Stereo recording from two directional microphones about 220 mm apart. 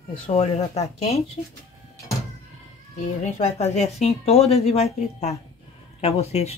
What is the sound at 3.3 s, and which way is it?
Speech, 30° left (ahead or behind).